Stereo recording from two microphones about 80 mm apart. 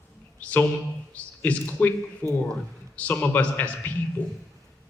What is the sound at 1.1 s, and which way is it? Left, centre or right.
A man's voice, centre.